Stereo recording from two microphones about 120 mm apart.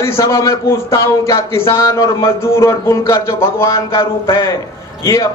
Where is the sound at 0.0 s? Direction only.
25° left (ahead or behind).